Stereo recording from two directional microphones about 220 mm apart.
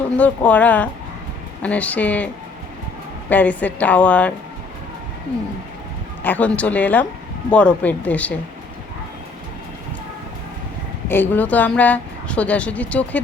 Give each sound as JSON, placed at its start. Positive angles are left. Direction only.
{"t": 0.2, "sound": "speech", "side_deg": 5}
{"t": 6.2, "sound": "speech", "side_deg": 5}
{"t": 11.1, "sound": "speech", "side_deg": 10}